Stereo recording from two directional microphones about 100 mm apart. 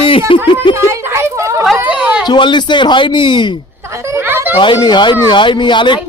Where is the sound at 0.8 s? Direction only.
25° right (ahead or behind).